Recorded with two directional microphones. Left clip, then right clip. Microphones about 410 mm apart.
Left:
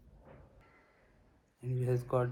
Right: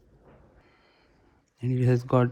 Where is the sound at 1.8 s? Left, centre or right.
Centre.